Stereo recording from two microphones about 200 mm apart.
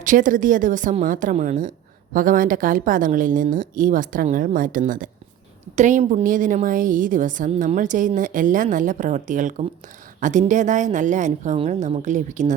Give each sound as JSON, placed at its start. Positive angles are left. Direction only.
{"t": 0.0, "sound": "a woman's voice", "side_deg": -40}